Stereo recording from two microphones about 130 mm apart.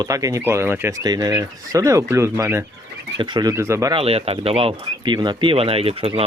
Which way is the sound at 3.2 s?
35° right (ahead or behind).